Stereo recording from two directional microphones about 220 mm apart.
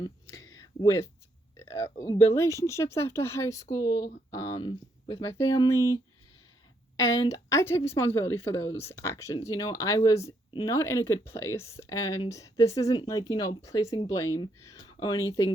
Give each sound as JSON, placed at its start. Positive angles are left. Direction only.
{"t": 0.0, "sound": "a sound", "side_deg": 15}
{"t": 1.5, "sound": "speech", "side_deg": 15}
{"t": 4.5, "sound": "speech", "side_deg": 25}
{"t": 5.2, "sound": "speech", "side_deg": 15}
{"t": 6.9, "sound": "speech", "side_deg": 15}